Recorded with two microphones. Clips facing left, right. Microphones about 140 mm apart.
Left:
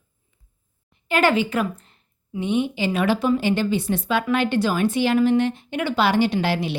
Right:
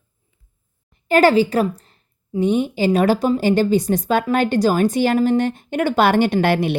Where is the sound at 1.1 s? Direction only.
40° right (ahead or behind).